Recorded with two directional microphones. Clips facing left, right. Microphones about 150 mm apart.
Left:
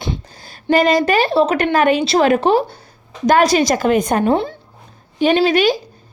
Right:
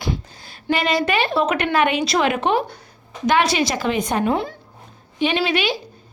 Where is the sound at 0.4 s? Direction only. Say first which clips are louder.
Left 7 dB; 40° left (ahead or behind).